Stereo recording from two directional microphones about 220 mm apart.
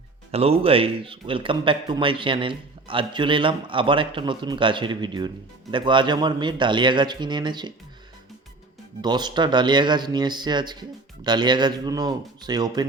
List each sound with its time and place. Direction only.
0.3 s a man's voice: 25° right (ahead or behind)
9.0 s a man's voice: 20° right (ahead or behind)